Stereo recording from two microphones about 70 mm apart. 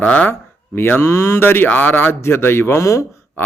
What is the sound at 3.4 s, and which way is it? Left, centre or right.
Pig, left.